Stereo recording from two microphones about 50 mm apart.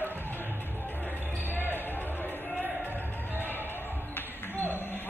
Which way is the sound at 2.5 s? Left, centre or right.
Right.